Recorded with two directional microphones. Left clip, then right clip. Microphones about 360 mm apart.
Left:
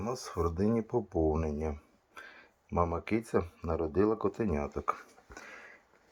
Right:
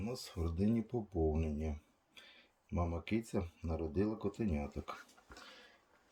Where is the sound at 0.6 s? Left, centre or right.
Centre.